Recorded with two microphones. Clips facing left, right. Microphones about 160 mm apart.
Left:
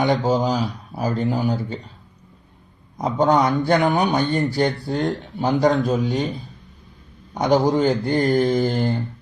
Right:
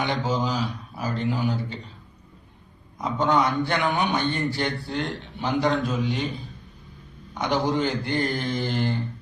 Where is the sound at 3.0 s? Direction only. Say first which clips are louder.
Left 5 dB; 40° left (ahead or behind).